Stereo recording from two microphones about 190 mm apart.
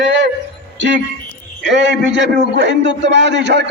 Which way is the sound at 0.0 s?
65° right (ahead or behind).